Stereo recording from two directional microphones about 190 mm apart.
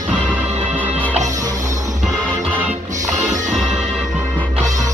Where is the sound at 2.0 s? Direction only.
5° right (ahead or behind).